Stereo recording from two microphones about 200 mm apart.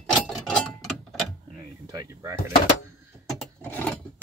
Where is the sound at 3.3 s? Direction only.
5° left (ahead or behind).